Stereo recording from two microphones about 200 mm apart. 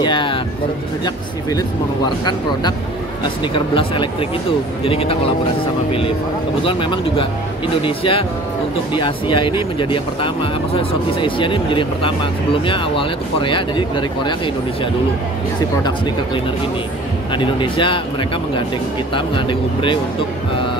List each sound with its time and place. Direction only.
0.0 s speech: 25° left (ahead or behind)
2.0 s speech: 20° left (ahead or behind)
6.6 s speech: 25° left (ahead or behind)
17.3 s speech: 25° left (ahead or behind)
19.1 s speech: 25° left (ahead or behind)